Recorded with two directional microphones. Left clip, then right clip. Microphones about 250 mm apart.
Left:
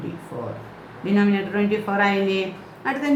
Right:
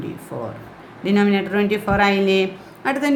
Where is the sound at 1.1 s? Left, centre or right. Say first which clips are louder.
Right 3 dB; right.